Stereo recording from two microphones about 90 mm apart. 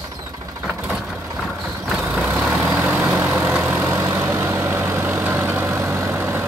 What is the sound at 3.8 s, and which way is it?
Vehicle, 30° right (ahead or behind).